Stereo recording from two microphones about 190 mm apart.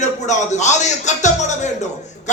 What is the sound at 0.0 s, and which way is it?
A man's voice, 40° left (ahead or behind).